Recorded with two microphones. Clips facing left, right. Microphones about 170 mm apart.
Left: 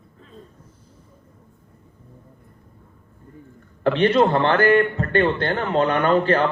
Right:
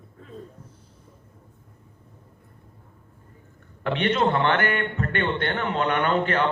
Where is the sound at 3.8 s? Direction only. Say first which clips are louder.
Left 6 dB; 35° left (ahead or behind).